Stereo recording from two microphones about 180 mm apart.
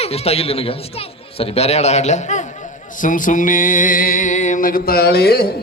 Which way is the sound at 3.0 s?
45° left (ahead or behind).